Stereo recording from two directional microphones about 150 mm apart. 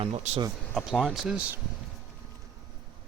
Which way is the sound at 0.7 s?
Centre (ahead or behind).